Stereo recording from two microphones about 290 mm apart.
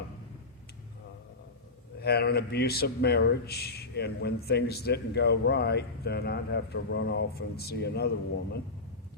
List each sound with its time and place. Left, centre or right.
2.0 s a man's voice: left